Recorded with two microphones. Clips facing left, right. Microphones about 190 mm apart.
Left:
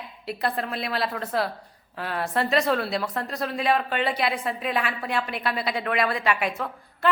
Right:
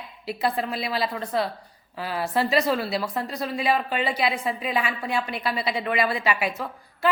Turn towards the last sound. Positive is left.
turn(degrees=0)  # may be behind; listen again after turning